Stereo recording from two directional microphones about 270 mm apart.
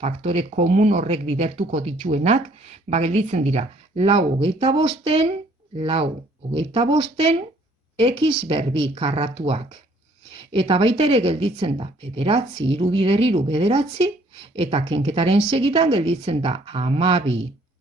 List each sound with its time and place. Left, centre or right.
0.0 s speech: right